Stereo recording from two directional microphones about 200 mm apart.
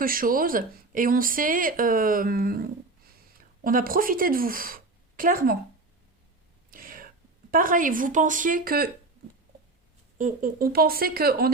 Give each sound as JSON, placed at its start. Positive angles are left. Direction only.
{"t": 0.0, "sound": "speech", "side_deg": -45}
{"t": 6.7, "sound": "whispering", "side_deg": -45}
{"t": 7.5, "sound": "speech", "side_deg": -45}
{"t": 10.2, "sound": "speech", "side_deg": -40}